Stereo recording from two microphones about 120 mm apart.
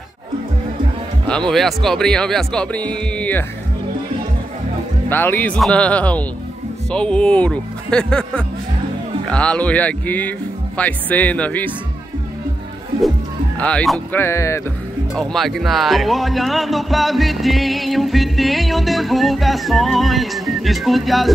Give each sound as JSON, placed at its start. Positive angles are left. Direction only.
{"t": 1.5, "sound": "speech", "side_deg": 0}
{"t": 5.1, "sound": "speech", "side_deg": 15}
{"t": 13.6, "sound": "speech", "side_deg": 10}
{"t": 15.1, "sound": "speech", "side_deg": 0}